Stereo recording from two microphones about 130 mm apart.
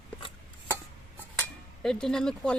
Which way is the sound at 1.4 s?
5° left (ahead or behind).